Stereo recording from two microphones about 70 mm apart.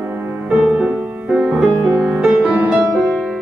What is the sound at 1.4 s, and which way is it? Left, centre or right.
Music, centre.